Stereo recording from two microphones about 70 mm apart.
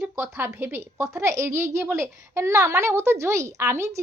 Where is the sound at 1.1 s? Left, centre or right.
Right.